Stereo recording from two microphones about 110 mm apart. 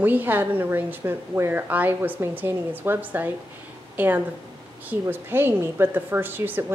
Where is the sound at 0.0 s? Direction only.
15° right (ahead or behind).